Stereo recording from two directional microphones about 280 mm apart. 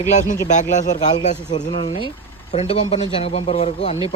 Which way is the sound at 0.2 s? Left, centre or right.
Left.